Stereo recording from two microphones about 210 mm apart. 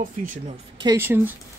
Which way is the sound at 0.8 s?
10° right (ahead or behind).